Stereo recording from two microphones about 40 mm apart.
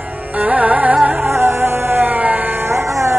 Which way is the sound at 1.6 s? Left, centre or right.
Right.